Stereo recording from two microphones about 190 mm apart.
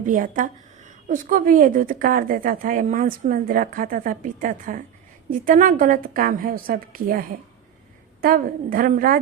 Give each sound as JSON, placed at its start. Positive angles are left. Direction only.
{"t": 0.0, "sound": "a woman's voice", "side_deg": -45}